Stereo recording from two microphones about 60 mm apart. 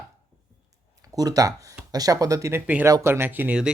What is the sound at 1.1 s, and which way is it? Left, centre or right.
Speech, right.